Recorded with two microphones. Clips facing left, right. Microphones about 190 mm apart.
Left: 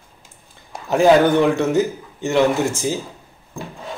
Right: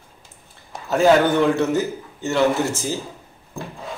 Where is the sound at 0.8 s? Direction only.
15° left (ahead or behind).